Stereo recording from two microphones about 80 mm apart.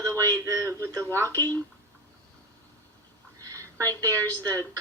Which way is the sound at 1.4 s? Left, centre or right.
Left.